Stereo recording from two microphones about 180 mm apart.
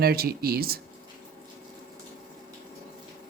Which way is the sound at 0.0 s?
60° right (ahead or behind).